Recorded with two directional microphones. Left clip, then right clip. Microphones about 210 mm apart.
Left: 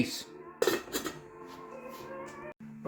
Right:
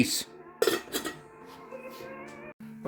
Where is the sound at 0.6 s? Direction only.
5° right (ahead or behind).